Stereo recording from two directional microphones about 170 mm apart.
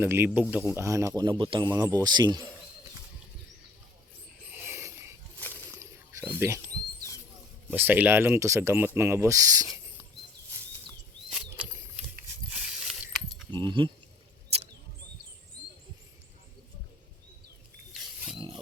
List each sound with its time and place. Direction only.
0.0 s speech: 10° right (ahead or behind)
4.5 s mechanisms: 10° right (ahead or behind)
5.4 s a sound: 10° left (ahead or behind)
6.4 s speech: 15° right (ahead or behind)
11.3 s rodents: 5° right (ahead or behind)
12.5 s pulleys: 5° right (ahead or behind)
13.5 s speech: 25° right (ahead or behind)
14.5 s a sound: 35° right (ahead or behind)
18.3 s a sound: 25° right (ahead or behind)